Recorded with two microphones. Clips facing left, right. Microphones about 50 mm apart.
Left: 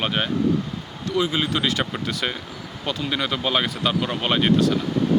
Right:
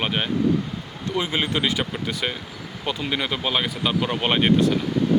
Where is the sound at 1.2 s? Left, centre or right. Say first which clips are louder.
Left 2 dB; right.